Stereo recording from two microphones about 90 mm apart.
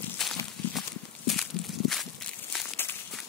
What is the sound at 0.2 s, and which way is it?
Walk, centre (ahead or behind).